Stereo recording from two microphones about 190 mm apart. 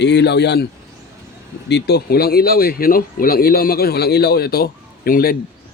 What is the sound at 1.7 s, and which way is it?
Speech, 60° left (ahead or behind).